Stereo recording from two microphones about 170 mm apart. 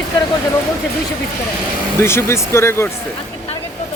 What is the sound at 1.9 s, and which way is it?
Speech, 15° left (ahead or behind).